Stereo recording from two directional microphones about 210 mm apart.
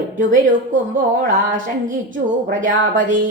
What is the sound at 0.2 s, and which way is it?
A woman's voice, 40° right (ahead or behind).